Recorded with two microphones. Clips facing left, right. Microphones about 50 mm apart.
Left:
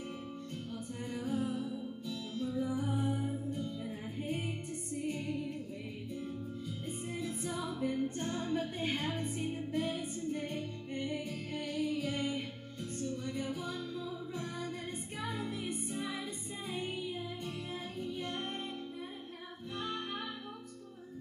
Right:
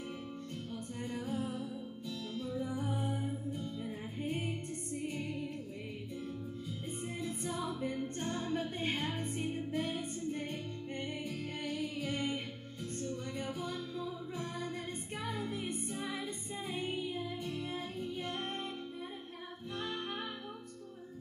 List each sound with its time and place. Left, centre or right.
1.1 s music: centre
7.2 s music: centre
15.2 s music: centre
16.7 s music: centre